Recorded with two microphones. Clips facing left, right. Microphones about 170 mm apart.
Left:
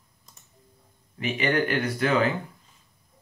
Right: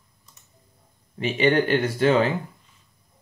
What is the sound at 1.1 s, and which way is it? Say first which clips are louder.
Speech: right 5 dB; 30° right (ahead or behind).